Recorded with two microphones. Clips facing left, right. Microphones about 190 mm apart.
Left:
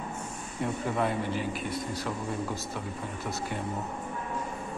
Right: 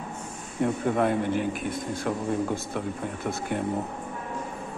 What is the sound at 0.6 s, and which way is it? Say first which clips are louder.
A man's voice: right 5 dB; 55° right (ahead or behind).